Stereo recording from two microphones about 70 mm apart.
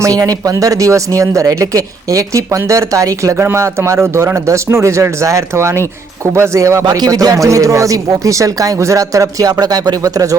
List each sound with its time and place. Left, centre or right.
0.0 s speech: right
3.3 s speech: right
6.8 s speech: right